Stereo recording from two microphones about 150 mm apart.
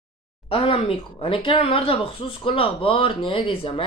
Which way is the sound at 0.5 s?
35° left (ahead or behind).